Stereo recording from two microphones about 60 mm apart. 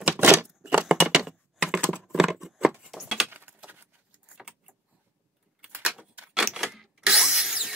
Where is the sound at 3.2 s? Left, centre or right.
Right.